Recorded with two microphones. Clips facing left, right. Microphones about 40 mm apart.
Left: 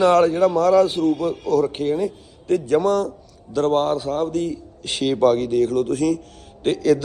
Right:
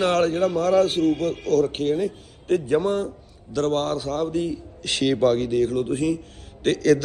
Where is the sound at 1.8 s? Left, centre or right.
Right.